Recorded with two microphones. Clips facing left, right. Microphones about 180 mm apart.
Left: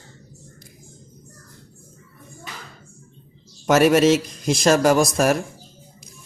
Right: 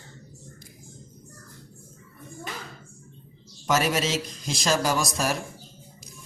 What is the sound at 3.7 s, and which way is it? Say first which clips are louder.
A man's voice: left 10 dB; 60° left (ahead or behind).